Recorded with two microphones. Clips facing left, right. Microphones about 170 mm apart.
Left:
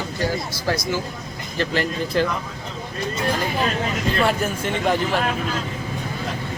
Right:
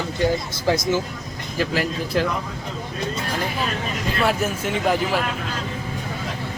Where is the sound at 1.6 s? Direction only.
5° right (ahead or behind).